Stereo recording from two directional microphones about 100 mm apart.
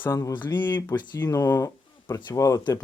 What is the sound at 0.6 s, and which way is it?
Speech, 50° left (ahead or behind).